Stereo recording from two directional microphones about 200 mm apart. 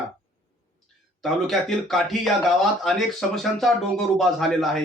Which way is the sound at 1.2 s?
Centre (ahead or behind).